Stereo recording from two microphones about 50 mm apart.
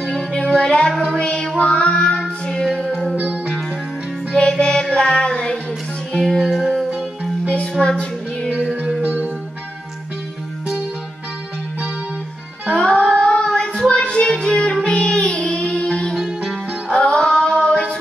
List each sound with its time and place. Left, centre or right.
0.6 s music: centre
1.6 s child singing: left
4.3 s music: centre
4.9 s child singing: centre
6.4 s music: centre
7.4 s music: left
12.7 s music: left
13.6 s child singing: left
14.3 s music: centre
17.0 s female singing: centre